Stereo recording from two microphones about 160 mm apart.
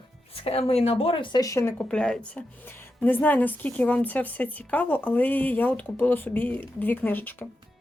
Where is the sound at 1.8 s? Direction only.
5° left (ahead or behind).